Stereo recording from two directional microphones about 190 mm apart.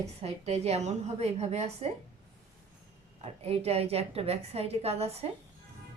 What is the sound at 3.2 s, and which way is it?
A woman's voice, 30° right (ahead or behind).